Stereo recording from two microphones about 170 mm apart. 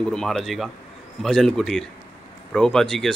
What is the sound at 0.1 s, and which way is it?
Speech, centre (ahead or behind).